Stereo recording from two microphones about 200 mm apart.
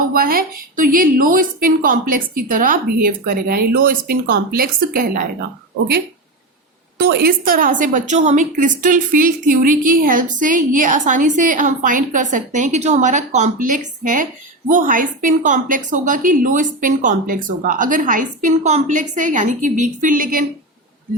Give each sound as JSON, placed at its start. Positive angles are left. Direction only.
{"t": 0.1, "sound": "a woman's voice", "side_deg": -45}
{"t": 7.0, "sound": "a woman's voice", "side_deg": -50}